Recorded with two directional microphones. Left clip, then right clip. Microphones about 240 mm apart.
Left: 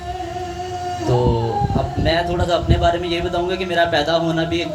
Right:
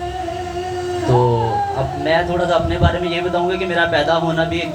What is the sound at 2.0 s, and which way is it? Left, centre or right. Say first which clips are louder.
A man's voice: right 3 dB; left.